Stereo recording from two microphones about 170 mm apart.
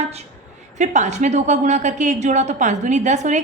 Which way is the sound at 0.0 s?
40° right (ahead or behind).